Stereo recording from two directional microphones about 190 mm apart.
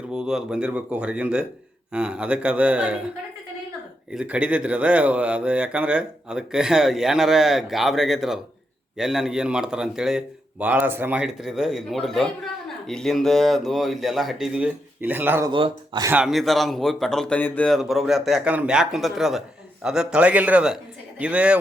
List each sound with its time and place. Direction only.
0.1 s speech: 5° right (ahead or behind)
4.1 s speech: 5° right (ahead or behind)
15.4 s speech: 25° right (ahead or behind)
16.1 s speech: centre (ahead or behind)